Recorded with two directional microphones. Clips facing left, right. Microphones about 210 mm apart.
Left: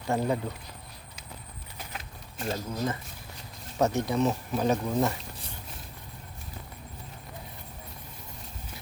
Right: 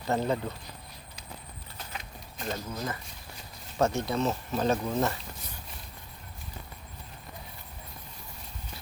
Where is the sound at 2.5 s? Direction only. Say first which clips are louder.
Left 3 dB; 25° left (ahead or behind).